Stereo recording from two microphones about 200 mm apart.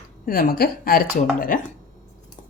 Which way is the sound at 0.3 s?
45° left (ahead or behind).